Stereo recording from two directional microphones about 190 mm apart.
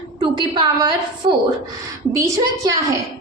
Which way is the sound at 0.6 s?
25° right (ahead or behind).